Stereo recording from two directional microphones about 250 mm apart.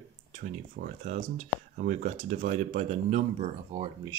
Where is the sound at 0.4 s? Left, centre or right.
Right.